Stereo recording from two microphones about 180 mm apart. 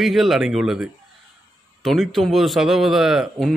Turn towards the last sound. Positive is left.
turn(degrees=0)  # may be behind; listen again after turning